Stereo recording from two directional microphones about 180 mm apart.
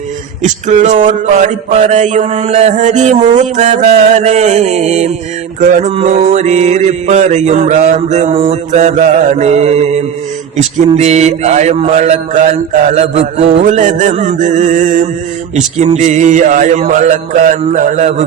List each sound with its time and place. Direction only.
0.4 s mantra: 45° right (ahead or behind)